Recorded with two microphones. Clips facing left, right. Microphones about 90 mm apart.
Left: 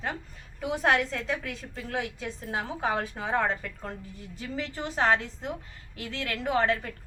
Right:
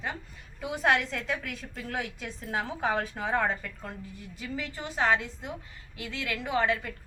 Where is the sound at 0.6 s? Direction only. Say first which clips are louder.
Left 1 dB; 30° left (ahead or behind).